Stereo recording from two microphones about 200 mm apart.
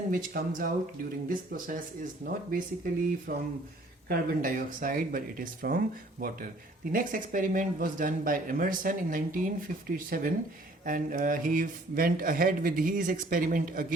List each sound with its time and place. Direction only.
0.1 s speech: 45° right (ahead or behind)